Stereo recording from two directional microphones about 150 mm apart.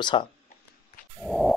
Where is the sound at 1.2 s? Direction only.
Centre (ahead or behind).